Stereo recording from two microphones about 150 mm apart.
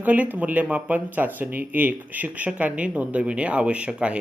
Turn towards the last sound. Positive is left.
turn(degrees=-5)  # may be behind; listen again after turning